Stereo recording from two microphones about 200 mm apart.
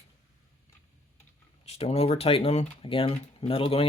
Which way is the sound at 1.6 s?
30° left (ahead or behind).